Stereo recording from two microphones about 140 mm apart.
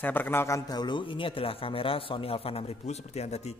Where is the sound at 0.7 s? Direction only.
30° left (ahead or behind).